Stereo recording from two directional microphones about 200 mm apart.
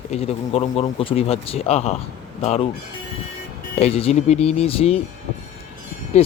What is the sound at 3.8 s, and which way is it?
Speech, 30° left (ahead or behind).